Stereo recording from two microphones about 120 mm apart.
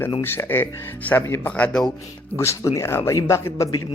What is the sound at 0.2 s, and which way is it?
Speech, 20° left (ahead or behind).